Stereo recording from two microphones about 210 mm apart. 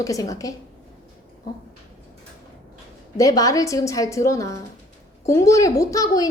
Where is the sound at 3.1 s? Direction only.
15° left (ahead or behind).